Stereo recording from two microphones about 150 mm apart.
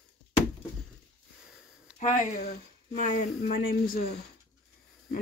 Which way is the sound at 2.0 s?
70° left (ahead or behind).